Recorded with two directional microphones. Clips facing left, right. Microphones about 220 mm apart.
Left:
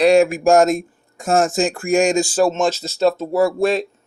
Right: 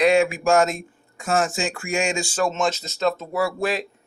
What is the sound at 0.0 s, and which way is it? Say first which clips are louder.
Speech: left 5 dB; 45° left (ahead or behind).